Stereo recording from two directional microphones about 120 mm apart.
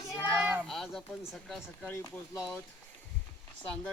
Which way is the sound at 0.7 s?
Centre (ahead or behind).